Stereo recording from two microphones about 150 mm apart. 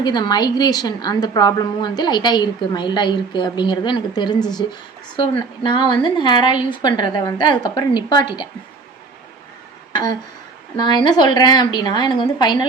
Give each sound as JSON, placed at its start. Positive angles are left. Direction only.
{"t": 0.0, "sound": "a woman's voice", "side_deg": 30}
{"t": 9.9, "sound": "a sound", "side_deg": 25}
{"t": 10.8, "sound": "a woman's voice", "side_deg": 30}